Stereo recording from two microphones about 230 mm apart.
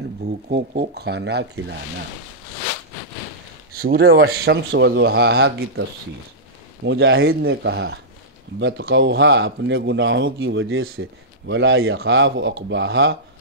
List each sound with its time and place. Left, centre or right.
0.5 s speech: right
3.7 s speech: right